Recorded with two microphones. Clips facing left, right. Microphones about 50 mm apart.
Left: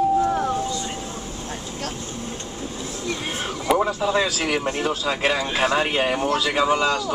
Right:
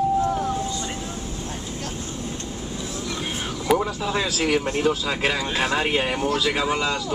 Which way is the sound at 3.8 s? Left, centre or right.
Left.